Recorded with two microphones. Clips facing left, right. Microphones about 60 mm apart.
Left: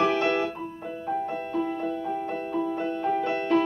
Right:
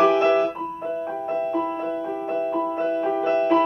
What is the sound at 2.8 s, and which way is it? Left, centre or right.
Music, right.